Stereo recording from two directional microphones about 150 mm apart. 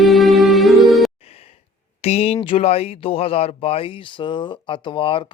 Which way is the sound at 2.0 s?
45° left (ahead or behind).